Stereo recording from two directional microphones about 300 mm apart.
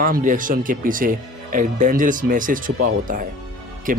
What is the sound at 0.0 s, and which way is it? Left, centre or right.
Speech, right.